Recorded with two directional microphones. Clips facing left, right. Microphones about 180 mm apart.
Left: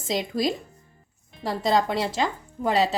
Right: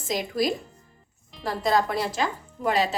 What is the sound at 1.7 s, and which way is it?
Speech, 25° left (ahead or behind).